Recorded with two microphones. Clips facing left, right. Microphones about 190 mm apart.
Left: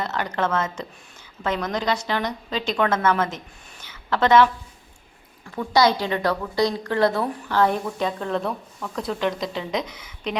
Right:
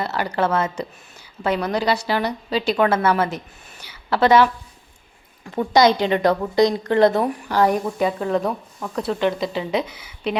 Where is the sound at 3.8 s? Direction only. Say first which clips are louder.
Right 3 dB; 10° right (ahead or behind).